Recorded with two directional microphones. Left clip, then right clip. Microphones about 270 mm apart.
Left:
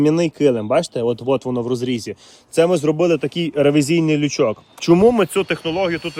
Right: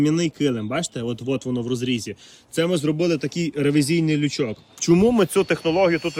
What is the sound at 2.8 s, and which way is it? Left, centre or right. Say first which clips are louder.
A man's voice: left 5 dB; left.